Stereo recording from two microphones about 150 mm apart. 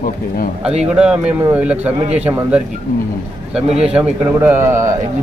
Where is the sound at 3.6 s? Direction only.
45° right (ahead or behind).